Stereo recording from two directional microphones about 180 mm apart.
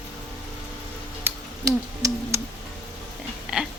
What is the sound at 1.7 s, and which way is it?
Owl, 15° right (ahead or behind).